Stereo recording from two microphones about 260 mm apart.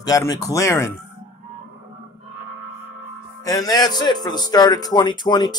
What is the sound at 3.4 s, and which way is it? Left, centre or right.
Speech, centre.